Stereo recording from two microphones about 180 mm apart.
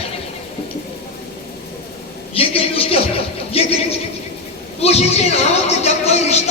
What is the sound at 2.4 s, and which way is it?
Speech, 30° left (ahead or behind).